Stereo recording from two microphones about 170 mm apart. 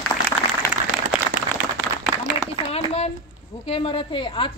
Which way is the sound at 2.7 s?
35° left (ahead or behind).